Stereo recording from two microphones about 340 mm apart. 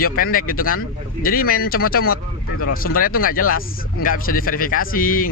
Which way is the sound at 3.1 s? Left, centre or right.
Left.